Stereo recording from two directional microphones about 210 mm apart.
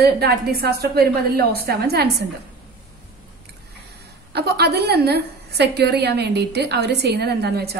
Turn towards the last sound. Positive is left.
turn(degrees=-50)  # may be behind; listen again after turning